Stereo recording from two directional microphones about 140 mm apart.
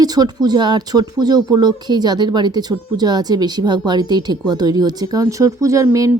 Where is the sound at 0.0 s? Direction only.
30° right (ahead or behind).